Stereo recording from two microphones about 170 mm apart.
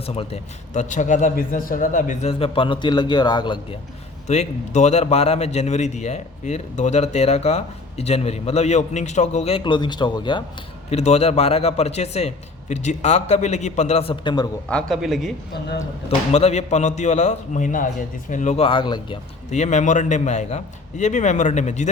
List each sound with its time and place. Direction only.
0.0 s a man's voice: 35° left (ahead or behind)
2.4 s a man's voice: 30° left (ahead or behind)
4.3 s a man's voice: 40° left (ahead or behind); by 10.4 s 25° left (ahead or behind)
10.8 s a man's voice: 40° left (ahead or behind)
14.7 s a man's voice: 5° left (ahead or behind)
16.0 s a man's voice: 40° left (ahead or behind)
19.5 s a man's voice: 45° left (ahead or behind)